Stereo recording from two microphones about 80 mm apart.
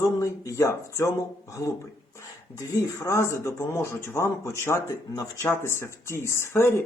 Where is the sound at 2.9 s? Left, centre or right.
Left.